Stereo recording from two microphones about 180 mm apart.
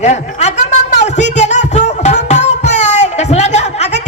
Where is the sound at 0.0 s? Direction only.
40° left (ahead or behind).